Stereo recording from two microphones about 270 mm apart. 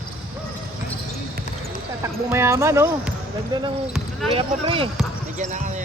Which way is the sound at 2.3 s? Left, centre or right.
Centre.